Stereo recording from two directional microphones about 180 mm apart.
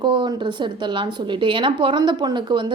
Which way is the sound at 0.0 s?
25° right (ahead or behind).